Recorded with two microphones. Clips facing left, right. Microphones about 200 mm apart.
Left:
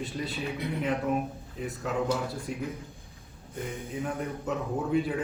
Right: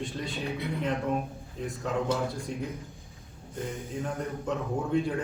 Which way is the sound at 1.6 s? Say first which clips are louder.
Even; 5° left (ahead or behind).